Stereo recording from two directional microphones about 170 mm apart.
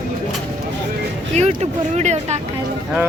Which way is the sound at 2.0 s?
40° right (ahead or behind).